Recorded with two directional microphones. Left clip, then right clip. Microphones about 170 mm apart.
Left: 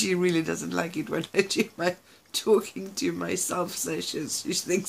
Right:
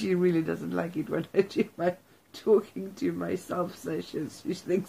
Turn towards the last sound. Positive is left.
turn(degrees=10)  # may be behind; listen again after turning